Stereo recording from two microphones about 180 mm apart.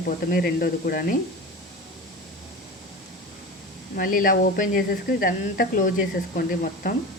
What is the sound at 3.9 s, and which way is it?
Speech, 50° left (ahead or behind).